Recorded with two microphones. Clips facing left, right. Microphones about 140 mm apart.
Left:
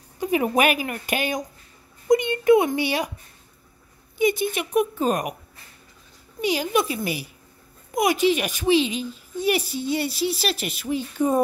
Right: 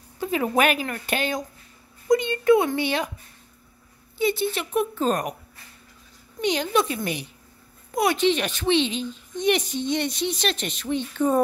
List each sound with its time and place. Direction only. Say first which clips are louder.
0.2 s speech: left 1 dB; 15° left (ahead or behind)
4.2 s speech: left 2 dB; 15° left (ahead or behind)
6.4 s speech: even; 10° left (ahead or behind)